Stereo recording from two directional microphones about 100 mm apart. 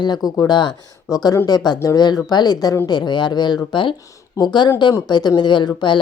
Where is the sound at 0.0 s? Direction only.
40° left (ahead or behind).